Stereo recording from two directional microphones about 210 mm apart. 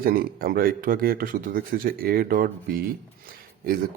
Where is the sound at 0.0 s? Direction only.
45° right (ahead or behind).